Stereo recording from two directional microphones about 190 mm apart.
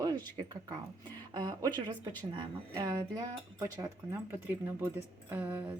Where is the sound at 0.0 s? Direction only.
20° right (ahead or behind).